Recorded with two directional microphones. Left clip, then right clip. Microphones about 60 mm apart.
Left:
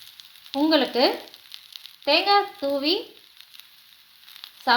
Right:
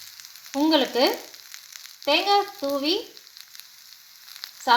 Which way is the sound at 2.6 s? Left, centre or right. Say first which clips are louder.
Left 1 dB; right.